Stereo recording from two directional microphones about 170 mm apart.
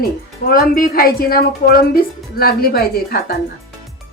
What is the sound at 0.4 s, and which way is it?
A woman's voice, 60° left (ahead or behind).